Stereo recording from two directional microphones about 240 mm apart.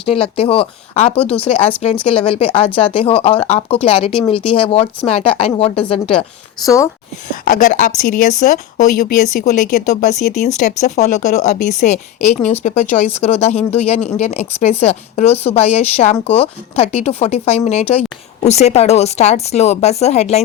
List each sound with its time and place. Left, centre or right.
0.0 s speech: left
7.4 s speech: left